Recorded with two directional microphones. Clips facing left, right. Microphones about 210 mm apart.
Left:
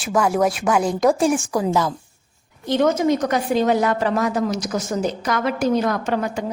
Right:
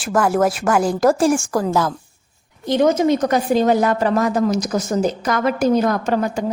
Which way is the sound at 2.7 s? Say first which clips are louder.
Right 2 dB; 15° right (ahead or behind).